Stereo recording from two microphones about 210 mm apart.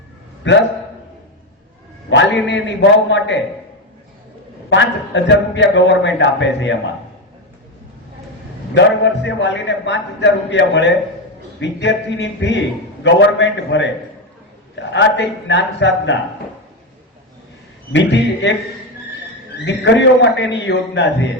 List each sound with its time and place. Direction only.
0.4 s a man's voice: 60° left (ahead or behind)
2.0 s a man's voice: 60° left (ahead or behind)
4.7 s a man's voice: 60° left (ahead or behind)
8.7 s a man's voice: 60° left (ahead or behind)
17.9 s a man's voice: 60° left (ahead or behind)
19.6 s a man's voice: 60° left (ahead or behind)